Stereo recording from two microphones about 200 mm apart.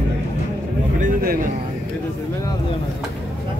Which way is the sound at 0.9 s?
40° right (ahead or behind).